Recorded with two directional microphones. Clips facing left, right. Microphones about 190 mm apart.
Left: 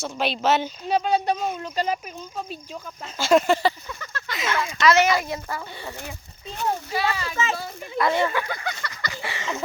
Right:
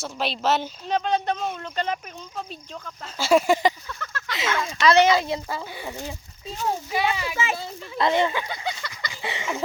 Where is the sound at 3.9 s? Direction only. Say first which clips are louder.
Even; 10° left (ahead or behind).